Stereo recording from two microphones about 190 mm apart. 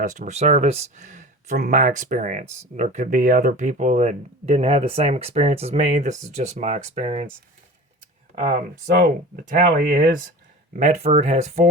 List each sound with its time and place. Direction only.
0.0 s speech: 40° right (ahead or behind)
8.4 s speech: 35° right (ahead or behind)
9.0 s speech: 50° right (ahead or behind)